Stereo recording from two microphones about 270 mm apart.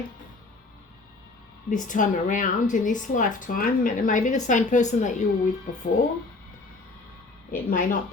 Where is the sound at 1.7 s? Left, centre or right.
Left.